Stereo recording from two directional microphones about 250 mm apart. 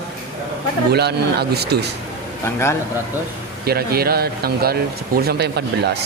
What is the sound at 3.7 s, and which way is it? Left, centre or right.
Speech, right.